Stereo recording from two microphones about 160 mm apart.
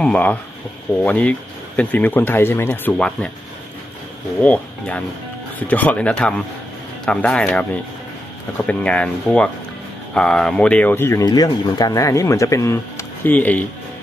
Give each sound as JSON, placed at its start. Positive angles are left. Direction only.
{"t": 0.0, "sound": "speech", "side_deg": 5}
{"t": 4.4, "sound": "speech", "side_deg": 10}
{"t": 8.6, "sound": "speech", "side_deg": 10}